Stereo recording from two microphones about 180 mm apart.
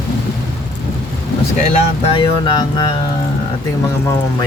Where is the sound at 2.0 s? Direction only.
30° left (ahead or behind).